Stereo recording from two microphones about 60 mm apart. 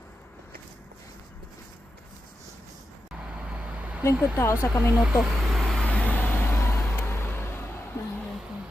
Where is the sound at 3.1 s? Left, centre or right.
Centre.